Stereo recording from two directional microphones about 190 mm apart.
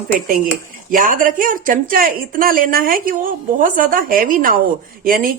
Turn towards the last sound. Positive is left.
turn(degrees=-50)  # may be behind; listen again after turning